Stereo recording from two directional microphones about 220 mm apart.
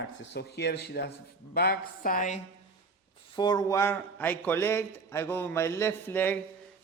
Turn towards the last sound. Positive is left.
turn(degrees=10)  # may be behind; listen again after turning